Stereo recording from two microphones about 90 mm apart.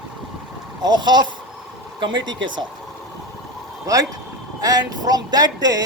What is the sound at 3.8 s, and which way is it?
A man's voice, 40° right (ahead or behind).